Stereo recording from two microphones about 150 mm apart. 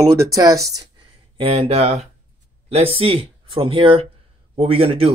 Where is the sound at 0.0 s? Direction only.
20° right (ahead or behind).